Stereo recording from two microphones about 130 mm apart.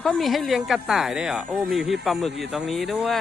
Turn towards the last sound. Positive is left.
turn(degrees=0)  # may be behind; listen again after turning